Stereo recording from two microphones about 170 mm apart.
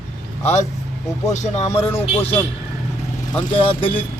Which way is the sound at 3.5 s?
30° left (ahead or behind).